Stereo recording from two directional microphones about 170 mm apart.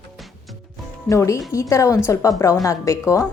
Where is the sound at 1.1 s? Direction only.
20° left (ahead or behind).